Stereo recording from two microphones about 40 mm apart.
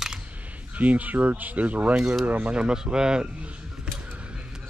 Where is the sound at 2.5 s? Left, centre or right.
Right.